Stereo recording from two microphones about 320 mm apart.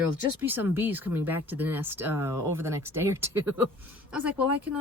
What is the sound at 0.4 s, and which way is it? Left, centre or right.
Speech, centre.